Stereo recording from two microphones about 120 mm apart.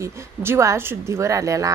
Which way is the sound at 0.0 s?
20° right (ahead or behind).